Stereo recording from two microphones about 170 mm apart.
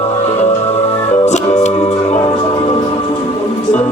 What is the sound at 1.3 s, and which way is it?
Music, 40° left (ahead or behind).